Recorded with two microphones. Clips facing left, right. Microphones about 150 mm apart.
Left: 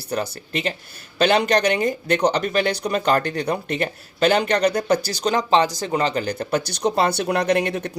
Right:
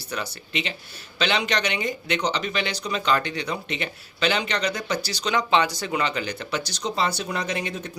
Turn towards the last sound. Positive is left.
turn(degrees=60)  # may be behind; listen again after turning